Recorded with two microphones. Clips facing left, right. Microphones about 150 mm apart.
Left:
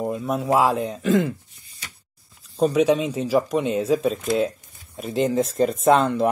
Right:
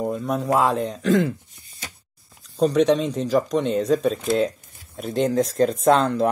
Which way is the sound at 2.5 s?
5° left (ahead or behind).